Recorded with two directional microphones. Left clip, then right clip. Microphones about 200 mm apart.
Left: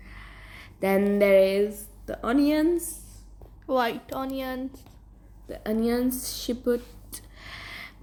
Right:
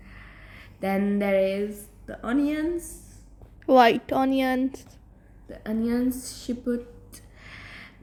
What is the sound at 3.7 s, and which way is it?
A woman's voice, 30° right (ahead or behind).